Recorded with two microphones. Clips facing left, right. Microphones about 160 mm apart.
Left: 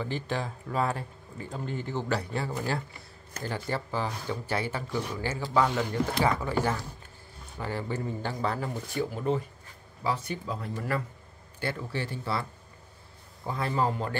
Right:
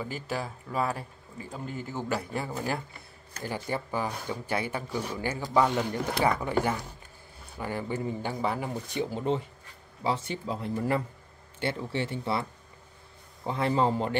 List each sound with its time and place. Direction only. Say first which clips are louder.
0.0 s speech: left 2 dB; 5° right (ahead or behind); by 14.1 s 25° right (ahead or behind)